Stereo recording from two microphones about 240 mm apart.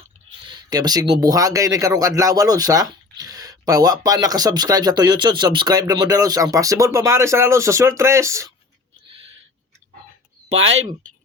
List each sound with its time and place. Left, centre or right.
0.4 s speech: centre
10.5 s speech: right